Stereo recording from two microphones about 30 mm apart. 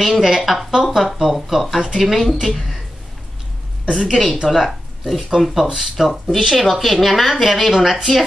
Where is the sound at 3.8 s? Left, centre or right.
Right.